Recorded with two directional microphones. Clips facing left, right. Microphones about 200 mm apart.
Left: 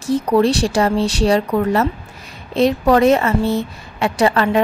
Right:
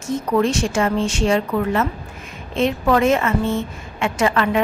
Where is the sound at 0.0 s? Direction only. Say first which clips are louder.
Left 4 dB; 35° left (ahead or behind).